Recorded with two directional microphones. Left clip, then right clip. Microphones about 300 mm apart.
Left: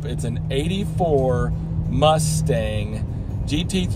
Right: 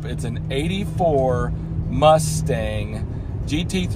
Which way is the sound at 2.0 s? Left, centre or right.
Centre.